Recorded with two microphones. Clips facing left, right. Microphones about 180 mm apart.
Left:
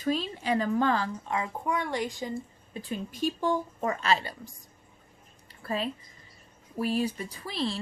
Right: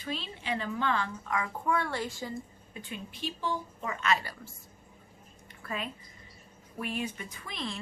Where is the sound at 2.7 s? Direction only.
35° left (ahead or behind).